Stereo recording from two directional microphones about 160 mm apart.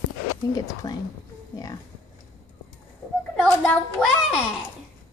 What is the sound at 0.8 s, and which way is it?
Speech, 25° left (ahead or behind).